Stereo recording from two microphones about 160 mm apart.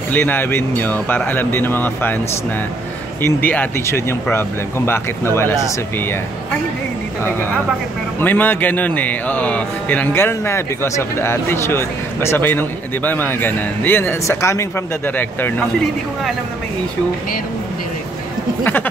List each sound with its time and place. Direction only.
0.1 s speech: 10° left (ahead or behind)
3.2 s speech: 10° left (ahead or behind)
8.2 s speech: 10° left (ahead or behind)
18.6 s speech: 10° left (ahead or behind)